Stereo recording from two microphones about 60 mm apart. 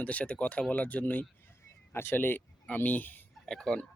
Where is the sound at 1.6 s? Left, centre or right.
Left.